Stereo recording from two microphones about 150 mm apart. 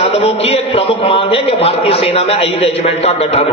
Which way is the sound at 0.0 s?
45° left (ahead or behind).